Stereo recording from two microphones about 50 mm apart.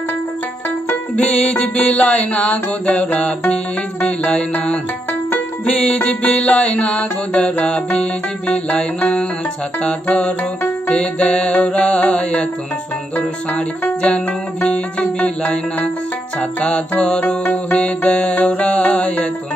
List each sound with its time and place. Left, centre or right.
1.1 s music: centre
14.6 s music: left
17.4 s music: left
17.7 s music: left